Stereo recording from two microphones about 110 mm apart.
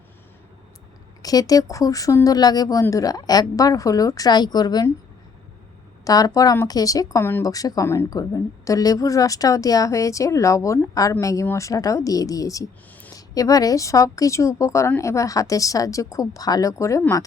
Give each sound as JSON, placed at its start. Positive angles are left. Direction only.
{"t": 1.2, "sound": "a woman's voice", "side_deg": 35}
{"t": 6.1, "sound": "a woman's voice", "side_deg": 35}
{"t": 7.4, "sound": "a woman's voice", "side_deg": 35}